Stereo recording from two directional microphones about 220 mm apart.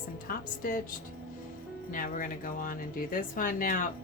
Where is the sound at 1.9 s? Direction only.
40° left (ahead or behind).